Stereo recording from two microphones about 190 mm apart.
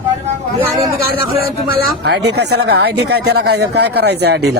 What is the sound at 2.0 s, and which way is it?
A man's voice, 60° right (ahead or behind).